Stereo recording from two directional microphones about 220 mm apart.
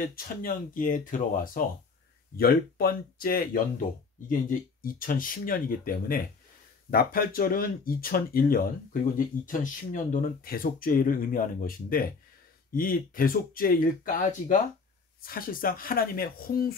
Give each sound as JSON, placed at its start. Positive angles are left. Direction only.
{"t": 0.0, "sound": "speech", "side_deg": 40}